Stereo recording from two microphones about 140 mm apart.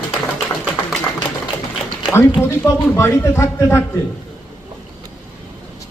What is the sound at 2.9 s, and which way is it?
Speech, 20° left (ahead or behind).